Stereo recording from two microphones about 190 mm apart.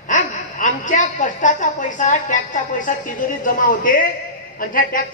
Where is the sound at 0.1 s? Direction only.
40° left (ahead or behind).